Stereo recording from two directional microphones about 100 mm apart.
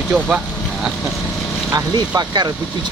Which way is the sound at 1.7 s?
40° right (ahead or behind).